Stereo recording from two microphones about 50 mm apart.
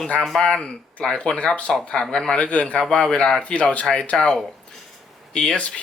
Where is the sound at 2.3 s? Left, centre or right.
Left; by 3.4 s centre.